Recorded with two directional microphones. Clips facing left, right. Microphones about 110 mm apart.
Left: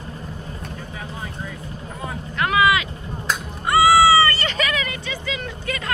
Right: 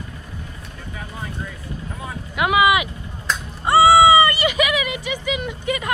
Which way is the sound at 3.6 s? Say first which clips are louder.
Right 3 dB; 25° right (ahead or behind).